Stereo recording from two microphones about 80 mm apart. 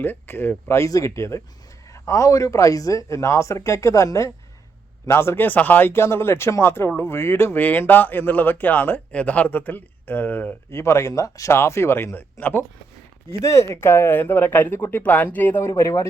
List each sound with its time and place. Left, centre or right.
0.0 s speech: left
0.9 s speech: left
10.7 s speech: left
13.4 s speech: left
15.7 s speech: left